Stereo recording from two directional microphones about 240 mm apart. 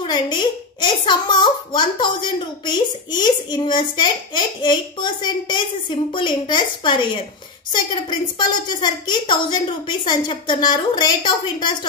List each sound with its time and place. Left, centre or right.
0.0 s a woman's voice: centre